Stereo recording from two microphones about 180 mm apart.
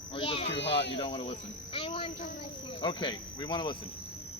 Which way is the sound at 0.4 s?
75° left (ahead or behind).